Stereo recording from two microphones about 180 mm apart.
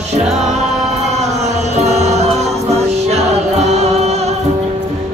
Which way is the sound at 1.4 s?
40° right (ahead or behind).